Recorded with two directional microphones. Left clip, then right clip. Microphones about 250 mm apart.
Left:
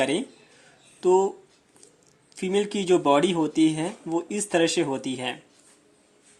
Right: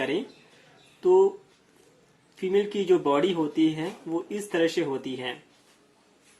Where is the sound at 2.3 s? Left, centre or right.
Left.